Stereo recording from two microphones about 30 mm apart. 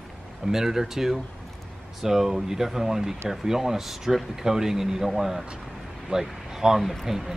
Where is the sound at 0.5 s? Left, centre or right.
Centre.